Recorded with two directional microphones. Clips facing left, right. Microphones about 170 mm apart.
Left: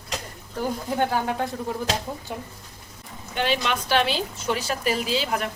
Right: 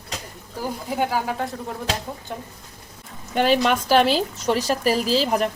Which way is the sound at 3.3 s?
45° right (ahead or behind).